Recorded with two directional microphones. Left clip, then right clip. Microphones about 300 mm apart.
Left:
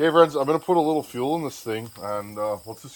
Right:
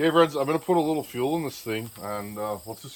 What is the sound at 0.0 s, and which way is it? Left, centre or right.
Speech, centre.